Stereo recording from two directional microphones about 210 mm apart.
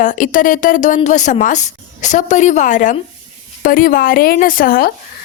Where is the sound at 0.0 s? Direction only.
40° left (ahead or behind).